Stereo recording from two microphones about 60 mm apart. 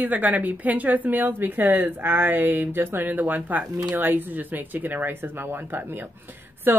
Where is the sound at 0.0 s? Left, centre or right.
Right.